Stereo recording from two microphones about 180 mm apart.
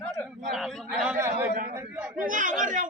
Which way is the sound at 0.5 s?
Centre (ahead or behind).